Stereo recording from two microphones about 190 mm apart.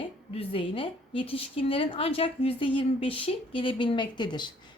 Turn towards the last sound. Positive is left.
turn(degrees=25)  # may be behind; listen again after turning